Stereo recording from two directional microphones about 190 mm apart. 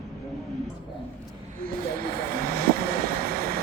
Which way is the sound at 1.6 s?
50° right (ahead or behind).